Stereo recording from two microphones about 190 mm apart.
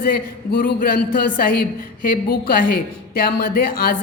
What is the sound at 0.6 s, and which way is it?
A woman's voice, 45° left (ahead or behind).